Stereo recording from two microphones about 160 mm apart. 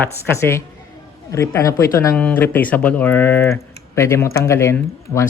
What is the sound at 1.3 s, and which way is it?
Speech, 20° left (ahead or behind).